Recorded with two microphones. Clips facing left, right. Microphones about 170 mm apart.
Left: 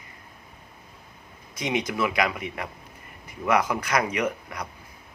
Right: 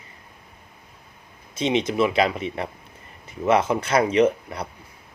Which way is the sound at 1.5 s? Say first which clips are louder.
Right 5 dB; 25° right (ahead or behind).